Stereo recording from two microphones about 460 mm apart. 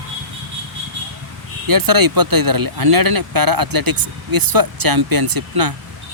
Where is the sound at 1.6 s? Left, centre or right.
Right.